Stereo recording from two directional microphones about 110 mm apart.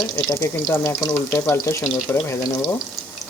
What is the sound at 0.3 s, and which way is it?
Speech, 25° left (ahead or behind).